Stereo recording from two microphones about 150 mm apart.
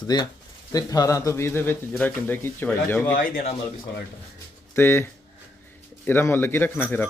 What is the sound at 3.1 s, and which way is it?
Speech, 70° left (ahead or behind).